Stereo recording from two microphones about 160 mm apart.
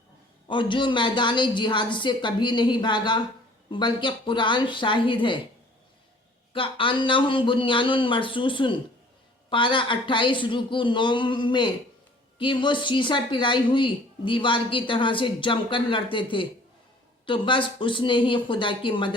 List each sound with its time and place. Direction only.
0.4 s speech: 30° left (ahead or behind)
6.5 s speech: 35° left (ahead or behind)